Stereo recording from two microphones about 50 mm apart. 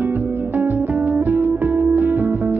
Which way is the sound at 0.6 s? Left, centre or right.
Right.